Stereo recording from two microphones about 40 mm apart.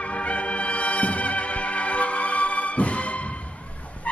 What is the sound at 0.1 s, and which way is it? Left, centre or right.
Music, left.